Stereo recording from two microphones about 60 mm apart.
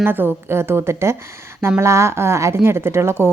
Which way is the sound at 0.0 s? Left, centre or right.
Right.